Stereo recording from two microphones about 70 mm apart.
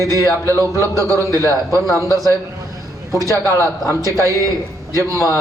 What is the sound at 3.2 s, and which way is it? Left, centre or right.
Speech, right.